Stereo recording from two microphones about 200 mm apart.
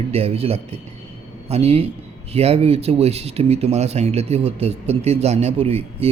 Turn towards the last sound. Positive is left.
turn(degrees=-30)  # may be behind; listen again after turning